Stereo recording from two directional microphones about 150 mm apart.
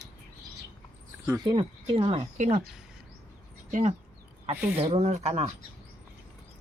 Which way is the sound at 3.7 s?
55° right (ahead or behind).